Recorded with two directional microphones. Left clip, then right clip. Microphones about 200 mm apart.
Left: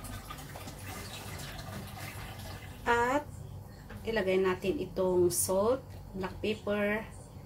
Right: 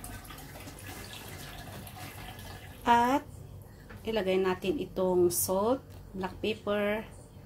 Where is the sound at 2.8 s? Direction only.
40° right (ahead or behind).